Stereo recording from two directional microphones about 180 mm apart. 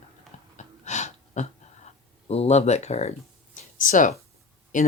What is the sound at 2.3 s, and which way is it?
Speech, 35° left (ahead or behind).